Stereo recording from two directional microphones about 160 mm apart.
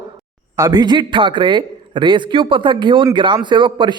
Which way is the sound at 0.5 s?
25° right (ahead or behind).